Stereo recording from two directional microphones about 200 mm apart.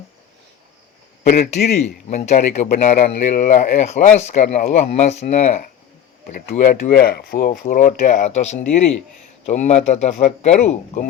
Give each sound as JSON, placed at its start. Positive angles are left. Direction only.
{"t": 1.2, "sound": "a man's voice", "side_deg": 35}